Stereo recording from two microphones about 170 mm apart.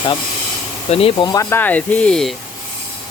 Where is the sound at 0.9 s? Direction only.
35° left (ahead or behind).